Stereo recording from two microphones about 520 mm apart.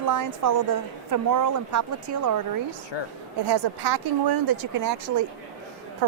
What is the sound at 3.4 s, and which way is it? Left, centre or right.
Speech, right.